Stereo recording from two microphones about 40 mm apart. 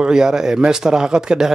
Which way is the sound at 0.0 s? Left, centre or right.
Centre.